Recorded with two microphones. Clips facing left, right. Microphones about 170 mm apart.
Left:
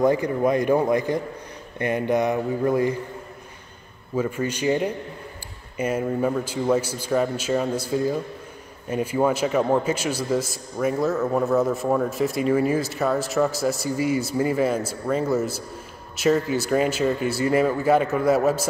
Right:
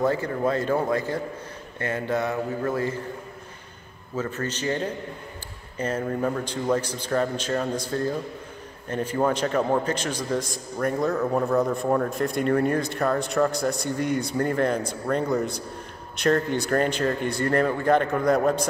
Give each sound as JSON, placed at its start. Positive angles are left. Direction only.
{"t": 0.0, "sound": "a man's voice", "side_deg": 15}
{"t": 4.1, "sound": "a man's voice", "side_deg": 10}